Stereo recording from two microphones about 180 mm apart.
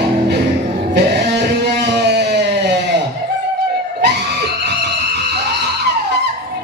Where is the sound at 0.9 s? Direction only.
70° right (ahead or behind).